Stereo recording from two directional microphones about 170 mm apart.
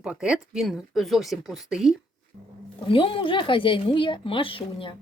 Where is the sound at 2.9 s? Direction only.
30° left (ahead or behind).